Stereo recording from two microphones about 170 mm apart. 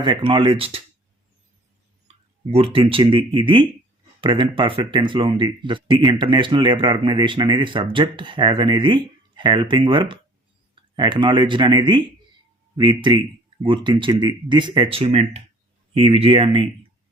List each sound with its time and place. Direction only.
0.0 s speech: 30° right (ahead or behind)
2.5 s speech: 35° right (ahead or behind)